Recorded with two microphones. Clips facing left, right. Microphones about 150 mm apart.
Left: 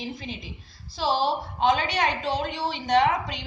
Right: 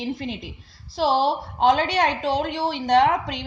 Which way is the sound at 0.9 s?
80° right.